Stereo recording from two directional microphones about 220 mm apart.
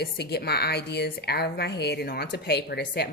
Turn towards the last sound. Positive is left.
turn(degrees=45)  # may be behind; listen again after turning